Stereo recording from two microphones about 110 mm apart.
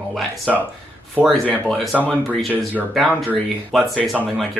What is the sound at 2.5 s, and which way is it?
Speech, 15° right (ahead or behind).